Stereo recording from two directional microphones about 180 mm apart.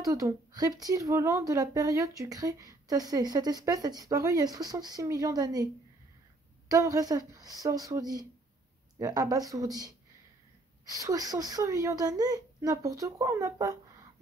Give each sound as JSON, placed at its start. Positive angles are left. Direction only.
{"t": 0.0, "sound": "speech", "side_deg": -20}
{"t": 6.7, "sound": "speech", "side_deg": -20}